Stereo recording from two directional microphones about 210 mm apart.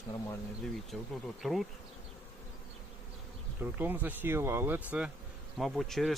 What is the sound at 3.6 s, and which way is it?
Speech, 10° right (ahead or behind).